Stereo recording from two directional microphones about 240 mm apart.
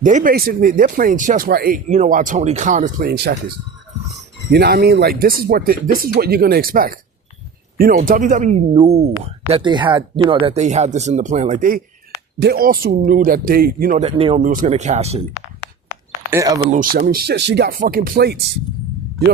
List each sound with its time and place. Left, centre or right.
0.0 s speech: right
4.4 s speech: right
16.3 s speech: centre
16.6 s speech: right